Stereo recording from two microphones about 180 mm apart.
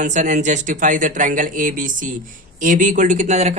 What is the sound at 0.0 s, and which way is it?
A man's voice, 40° right (ahead or behind).